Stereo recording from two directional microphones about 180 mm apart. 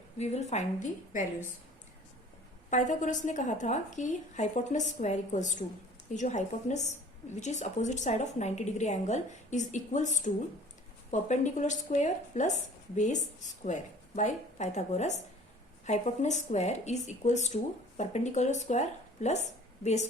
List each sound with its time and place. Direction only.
0.2 s speech: 40° left (ahead or behind)
2.6 s a woman's voice: 45° left (ahead or behind)